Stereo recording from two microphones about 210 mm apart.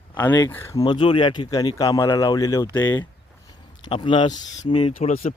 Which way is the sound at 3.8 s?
25° left (ahead or behind).